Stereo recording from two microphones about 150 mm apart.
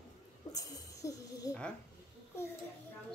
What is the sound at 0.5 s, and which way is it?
Speech, 25° left (ahead or behind).